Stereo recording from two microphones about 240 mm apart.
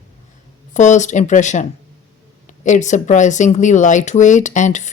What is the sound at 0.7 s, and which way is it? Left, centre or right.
Speech, left.